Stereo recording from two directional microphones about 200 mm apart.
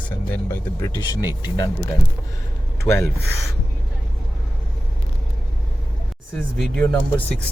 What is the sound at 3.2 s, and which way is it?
Speech, 55° right (ahead or behind).